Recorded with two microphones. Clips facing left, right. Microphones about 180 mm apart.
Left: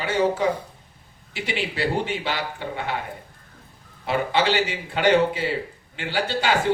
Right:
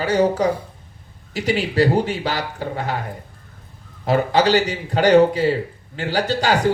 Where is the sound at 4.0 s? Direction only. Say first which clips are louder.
Right 5 dB; 40° right (ahead or behind).